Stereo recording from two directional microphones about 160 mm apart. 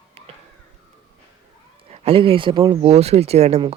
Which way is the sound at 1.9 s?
35° right (ahead or behind).